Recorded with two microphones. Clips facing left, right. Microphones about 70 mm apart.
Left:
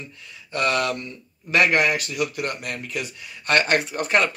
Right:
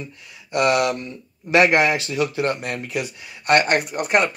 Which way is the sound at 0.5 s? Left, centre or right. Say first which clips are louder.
Right 4 dB; centre.